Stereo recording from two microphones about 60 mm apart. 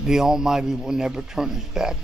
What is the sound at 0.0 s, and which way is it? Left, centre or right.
A man's voice, centre.